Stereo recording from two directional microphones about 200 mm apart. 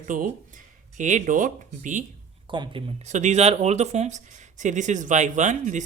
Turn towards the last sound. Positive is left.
turn(degrees=-40)  # may be behind; listen again after turning